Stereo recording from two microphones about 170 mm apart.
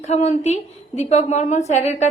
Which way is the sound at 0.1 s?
40° left (ahead or behind).